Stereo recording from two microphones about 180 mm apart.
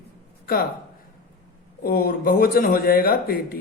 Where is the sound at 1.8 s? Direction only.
55° left (ahead or behind).